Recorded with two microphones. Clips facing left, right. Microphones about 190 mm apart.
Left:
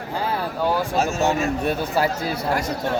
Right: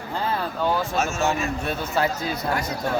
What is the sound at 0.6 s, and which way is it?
Speech, 10° left (ahead or behind).